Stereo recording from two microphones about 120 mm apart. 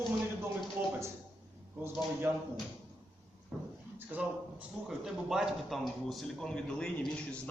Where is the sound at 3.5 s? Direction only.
5° right (ahead or behind).